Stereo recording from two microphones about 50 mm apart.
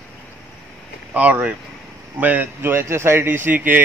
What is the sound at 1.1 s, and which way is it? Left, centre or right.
Speech, right.